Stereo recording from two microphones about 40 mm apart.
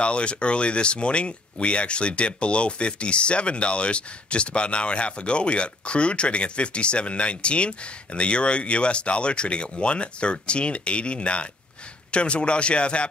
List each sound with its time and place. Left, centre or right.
0.0 s speech: left